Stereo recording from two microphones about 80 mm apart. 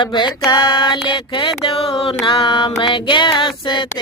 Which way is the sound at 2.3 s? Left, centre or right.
Left.